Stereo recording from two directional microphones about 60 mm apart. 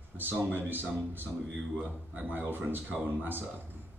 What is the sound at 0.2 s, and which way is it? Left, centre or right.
Speech, right.